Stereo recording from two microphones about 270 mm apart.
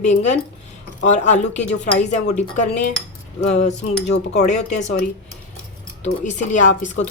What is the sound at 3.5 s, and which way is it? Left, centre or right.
A woman's voice, left.